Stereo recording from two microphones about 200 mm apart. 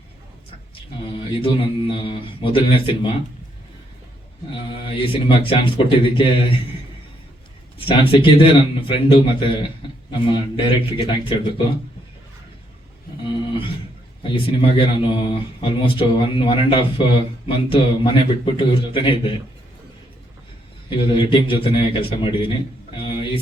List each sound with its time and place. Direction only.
1.0 s speech: 25° left (ahead or behind)
4.9 s speech: 25° left (ahead or behind)
7.8 s speech: 25° left (ahead or behind)
13.2 s a sound: 25° left (ahead or behind)
14.2 s speech: 25° left (ahead or behind)
21.2 s speech: 25° left (ahead or behind)